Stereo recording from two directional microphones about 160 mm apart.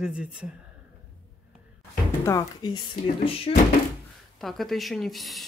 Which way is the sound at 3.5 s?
35° left (ahead or behind).